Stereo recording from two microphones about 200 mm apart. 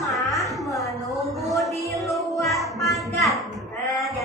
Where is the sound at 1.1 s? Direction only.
Centre (ahead or behind).